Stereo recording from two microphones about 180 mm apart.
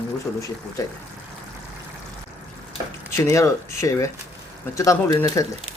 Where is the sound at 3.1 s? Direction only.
15° left (ahead or behind).